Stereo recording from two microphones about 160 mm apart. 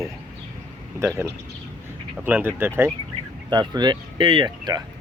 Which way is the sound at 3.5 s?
25° right (ahead or behind).